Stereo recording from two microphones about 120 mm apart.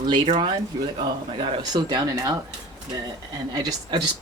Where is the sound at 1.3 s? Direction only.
40° right (ahead or behind).